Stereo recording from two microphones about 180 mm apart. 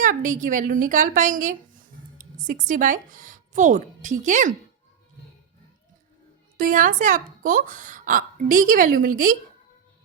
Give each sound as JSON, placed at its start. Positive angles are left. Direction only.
{"t": 0.0, "sound": "a woman's voice", "side_deg": -45}
{"t": 6.6, "sound": "a woman's voice", "side_deg": -50}